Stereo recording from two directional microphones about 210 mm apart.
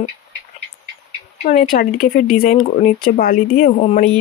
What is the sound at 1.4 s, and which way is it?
Speech, 40° left (ahead or behind).